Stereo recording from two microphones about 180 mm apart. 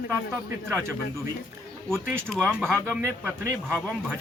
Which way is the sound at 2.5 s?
5° left (ahead or behind).